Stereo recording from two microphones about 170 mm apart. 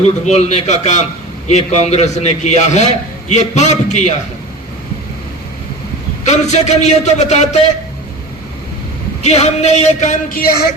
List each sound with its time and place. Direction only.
0.3 s a man's voice: 40° left (ahead or behind)
6.2 s a man's voice: 40° left (ahead or behind)
9.2 s speech: 40° left (ahead or behind); by 10.6 s 60° left (ahead or behind)